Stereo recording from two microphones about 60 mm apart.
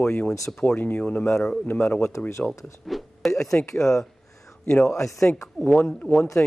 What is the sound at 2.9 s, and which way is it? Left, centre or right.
Speech, centre.